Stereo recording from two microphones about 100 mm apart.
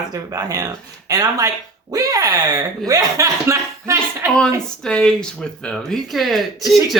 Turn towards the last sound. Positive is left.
turn(degrees=0)  # may be behind; listen again after turning